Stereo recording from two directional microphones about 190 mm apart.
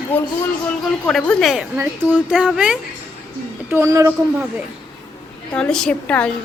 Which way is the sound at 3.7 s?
15° right (ahead or behind).